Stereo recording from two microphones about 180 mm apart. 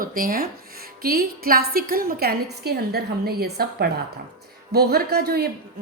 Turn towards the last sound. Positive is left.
turn(degrees=-60)  # may be behind; listen again after turning